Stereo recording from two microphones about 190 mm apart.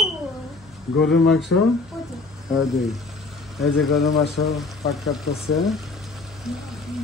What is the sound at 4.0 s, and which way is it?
Speech, 60° left (ahead or behind).